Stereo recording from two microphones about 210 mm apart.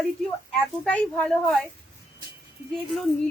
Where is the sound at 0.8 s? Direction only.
5° left (ahead or behind).